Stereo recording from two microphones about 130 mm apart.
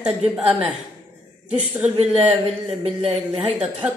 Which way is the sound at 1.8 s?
55° right (ahead or behind).